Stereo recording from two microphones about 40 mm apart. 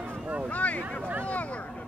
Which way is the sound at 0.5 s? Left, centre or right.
Left.